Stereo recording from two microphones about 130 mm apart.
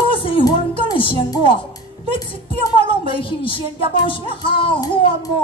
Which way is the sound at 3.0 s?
40° left (ahead or behind).